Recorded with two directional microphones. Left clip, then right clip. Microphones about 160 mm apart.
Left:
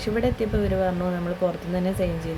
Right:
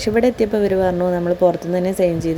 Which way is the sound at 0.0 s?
45° right (ahead or behind).